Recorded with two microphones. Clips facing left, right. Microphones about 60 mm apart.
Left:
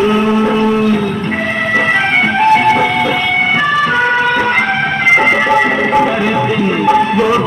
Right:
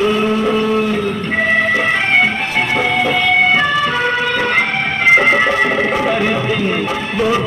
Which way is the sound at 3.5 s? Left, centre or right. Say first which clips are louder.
Left 2 dB; left.